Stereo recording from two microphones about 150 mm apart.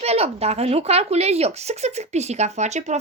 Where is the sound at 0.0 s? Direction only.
45° right (ahead or behind).